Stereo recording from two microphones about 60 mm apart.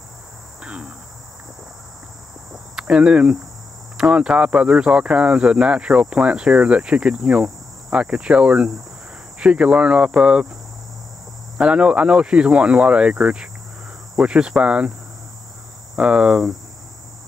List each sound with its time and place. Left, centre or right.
0.6 s cricket: centre
2.5 s cricket: centre
3.9 s speech: centre
11.5 s speech: centre
16.0 s speech: centre